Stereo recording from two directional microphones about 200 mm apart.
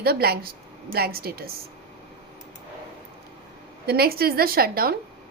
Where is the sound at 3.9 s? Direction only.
50° right (ahead or behind).